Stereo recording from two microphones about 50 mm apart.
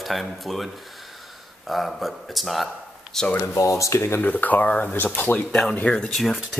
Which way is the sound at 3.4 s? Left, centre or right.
Left.